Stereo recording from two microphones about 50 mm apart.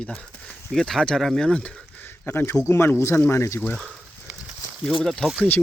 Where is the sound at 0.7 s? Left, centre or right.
Centre.